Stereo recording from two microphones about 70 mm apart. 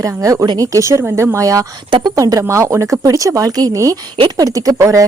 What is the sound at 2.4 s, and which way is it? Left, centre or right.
Speech, right.